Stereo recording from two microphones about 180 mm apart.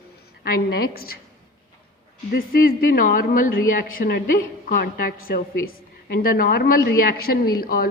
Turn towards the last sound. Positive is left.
turn(degrees=55)  # may be behind; listen again after turning